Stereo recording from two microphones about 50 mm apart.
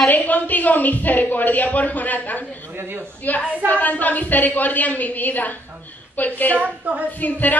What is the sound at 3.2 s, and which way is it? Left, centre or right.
A woman's voice, left.